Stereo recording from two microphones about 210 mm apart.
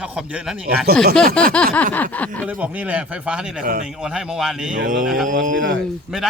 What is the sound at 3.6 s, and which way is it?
Speech, 45° right (ahead or behind).